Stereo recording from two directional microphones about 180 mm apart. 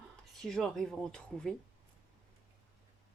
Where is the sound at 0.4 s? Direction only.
5° left (ahead or behind).